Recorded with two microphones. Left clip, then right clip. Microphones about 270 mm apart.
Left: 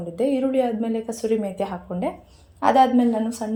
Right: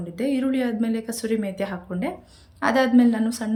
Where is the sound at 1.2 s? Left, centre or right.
Right.